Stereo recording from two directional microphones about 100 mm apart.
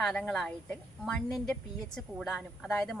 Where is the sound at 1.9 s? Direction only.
5° left (ahead or behind).